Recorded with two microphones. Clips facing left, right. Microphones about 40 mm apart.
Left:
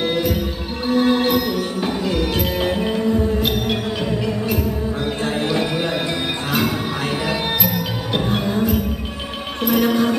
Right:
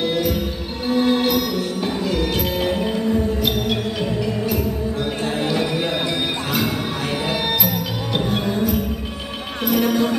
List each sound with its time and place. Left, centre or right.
0.0 s music: left
7.2 s music: left
9.7 s music: left